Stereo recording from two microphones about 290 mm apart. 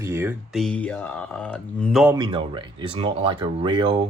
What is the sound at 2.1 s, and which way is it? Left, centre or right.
Speech, centre.